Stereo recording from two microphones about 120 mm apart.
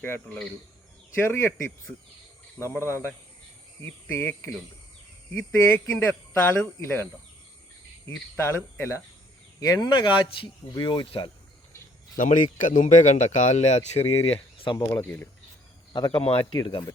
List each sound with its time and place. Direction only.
1.2 s speech: 20° left (ahead or behind)
2.6 s speech: 25° left (ahead or behind)
8.4 s speech: 20° left (ahead or behind); by 11.3 s 40° left (ahead or behind)
12.1 s a man's voice: 90° left; by 14.2 s 65° left (ahead or behind)
14.3 s speech: 45° left (ahead or behind)
15.0 s speech: 15° left (ahead or behind)
15.9 s speech: 35° left (ahead or behind)
16.2 s speech: 50° left (ahead or behind)